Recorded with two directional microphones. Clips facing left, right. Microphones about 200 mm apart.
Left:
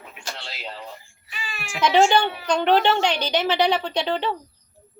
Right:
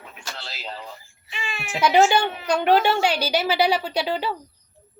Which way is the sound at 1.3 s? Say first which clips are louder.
Right 3 dB; 25° right (ahead or behind).